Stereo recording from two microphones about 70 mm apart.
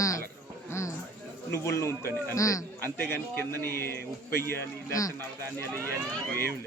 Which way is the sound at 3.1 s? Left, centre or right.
Left.